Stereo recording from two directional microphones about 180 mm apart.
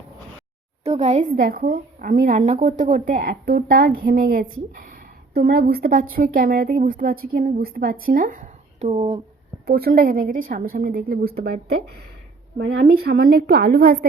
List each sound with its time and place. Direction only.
0.9 s speech: 40° right (ahead or behind)
9.6 s a woman's voice: 55° right (ahead or behind)